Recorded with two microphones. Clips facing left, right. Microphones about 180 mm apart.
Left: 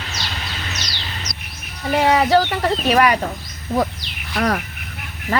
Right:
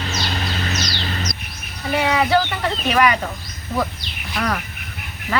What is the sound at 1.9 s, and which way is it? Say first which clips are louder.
Speech: left 3 dB; 40° left (ahead or behind).